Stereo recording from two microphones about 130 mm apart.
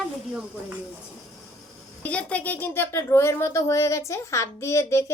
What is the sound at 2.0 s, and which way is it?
A woman's voice, 10° left (ahead or behind).